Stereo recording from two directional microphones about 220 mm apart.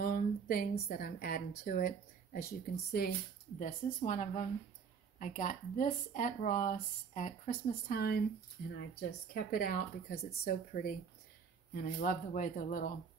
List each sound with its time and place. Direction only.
0.0 s a sound: 40° left (ahead or behind)
0.8 s speech: 40° left (ahead or behind)
3.5 s speech: 35° left (ahead or behind)